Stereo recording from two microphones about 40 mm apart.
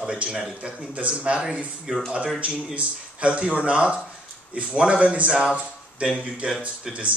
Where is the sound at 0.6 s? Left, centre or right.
Right.